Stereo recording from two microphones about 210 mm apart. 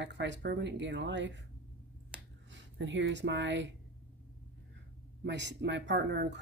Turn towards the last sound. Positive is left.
turn(degrees=-55)  # may be behind; listen again after turning